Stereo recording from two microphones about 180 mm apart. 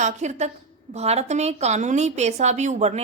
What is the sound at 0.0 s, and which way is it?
A woman's voice, 40° right (ahead or behind).